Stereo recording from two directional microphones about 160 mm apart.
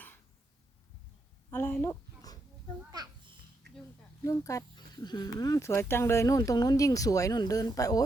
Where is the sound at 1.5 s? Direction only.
15° left (ahead or behind).